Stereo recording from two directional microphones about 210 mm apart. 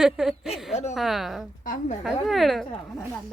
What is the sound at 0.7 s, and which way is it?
Speech, 30° left (ahead or behind).